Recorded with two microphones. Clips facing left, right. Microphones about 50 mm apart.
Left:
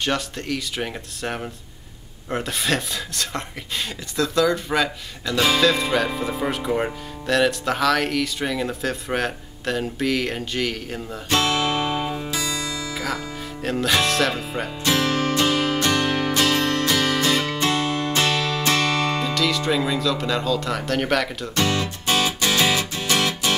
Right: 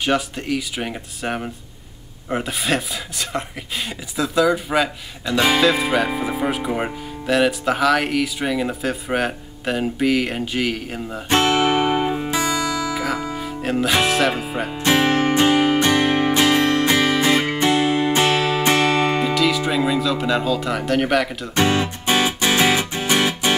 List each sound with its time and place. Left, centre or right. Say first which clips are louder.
0.0 s speech: right 4 dB; centre
11.2 s music: right 4 dB; right
12.9 s music: right 4 dB; centre
14.0 s speech: right 3 dB; centre
14.7 s music: right 5 dB; right
19.3 s speech: right 3 dB; centre
21.5 s music: right 4 dB; right